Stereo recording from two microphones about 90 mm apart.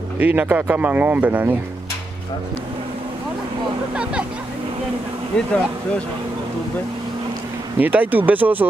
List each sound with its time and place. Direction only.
0.2 s speech: 20° right (ahead or behind)
3.9 s speech: 10° right (ahead or behind)
5.3 s speech: 10° left (ahead or behind)
7.8 s speech: 20° right (ahead or behind)